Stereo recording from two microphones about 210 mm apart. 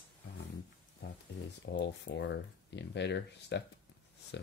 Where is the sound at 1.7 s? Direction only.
55° left (ahead or behind).